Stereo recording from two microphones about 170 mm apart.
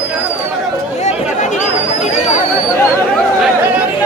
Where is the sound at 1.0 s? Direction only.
45° left (ahead or behind).